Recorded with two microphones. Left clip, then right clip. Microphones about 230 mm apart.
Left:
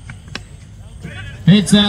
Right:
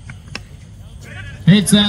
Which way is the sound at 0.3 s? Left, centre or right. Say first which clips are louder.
Left 1 dB; centre.